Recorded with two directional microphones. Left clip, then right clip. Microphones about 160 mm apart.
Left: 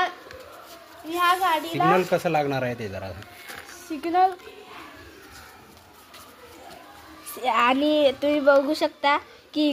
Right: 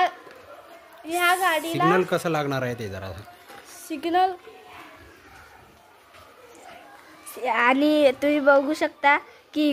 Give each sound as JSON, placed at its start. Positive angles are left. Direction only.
{"t": 1.1, "sound": "a woman's voice", "side_deg": -50}
{"t": 3.9, "sound": "speech", "side_deg": -45}
{"t": 7.3, "sound": "a child's voice", "side_deg": -20}
{"t": 7.7, "sound": "a child's voice", "side_deg": -35}